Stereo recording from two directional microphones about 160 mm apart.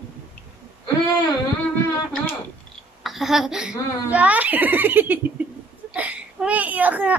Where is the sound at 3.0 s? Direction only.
Centre (ahead or behind).